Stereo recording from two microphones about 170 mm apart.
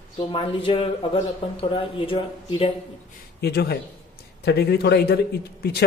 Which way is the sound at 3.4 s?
70° left (ahead or behind).